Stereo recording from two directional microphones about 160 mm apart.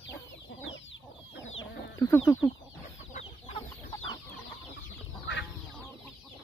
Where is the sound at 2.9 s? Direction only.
50° left (ahead or behind).